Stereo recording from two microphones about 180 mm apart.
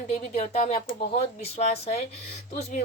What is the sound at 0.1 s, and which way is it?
Speech, 40° left (ahead or behind).